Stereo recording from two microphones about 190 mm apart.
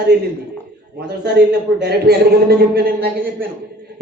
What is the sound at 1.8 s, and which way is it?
A woman's voice, 55° right (ahead or behind).